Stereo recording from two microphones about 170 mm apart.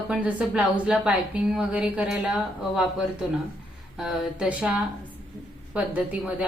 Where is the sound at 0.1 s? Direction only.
10° right (ahead or behind).